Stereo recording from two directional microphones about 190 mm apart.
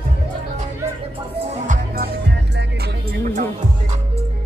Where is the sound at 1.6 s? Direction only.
45° right (ahead or behind).